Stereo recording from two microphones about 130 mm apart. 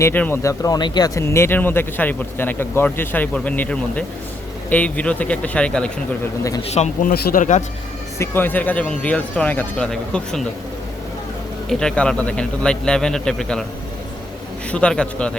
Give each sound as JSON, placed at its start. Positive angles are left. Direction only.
{"t": 0.0, "sound": "speech", "side_deg": 15}
{"t": 0.6, "sound": "speech", "side_deg": 30}
{"t": 6.6, "sound": "speech", "side_deg": 55}
{"t": 8.2, "sound": "speech", "side_deg": 15}
{"t": 11.7, "sound": "a man's voice", "side_deg": 5}
{"t": 14.7, "sound": "speech", "side_deg": 10}